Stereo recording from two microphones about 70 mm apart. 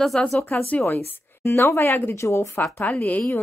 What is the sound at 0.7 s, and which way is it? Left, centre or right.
A woman's voice, left.